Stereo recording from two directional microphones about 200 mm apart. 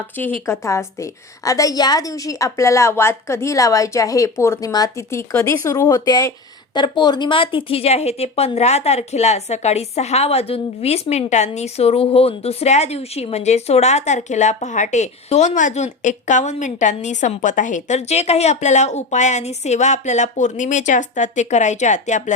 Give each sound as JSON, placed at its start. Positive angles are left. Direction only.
{"t": 0.4, "sound": "a woman's voice", "side_deg": 15}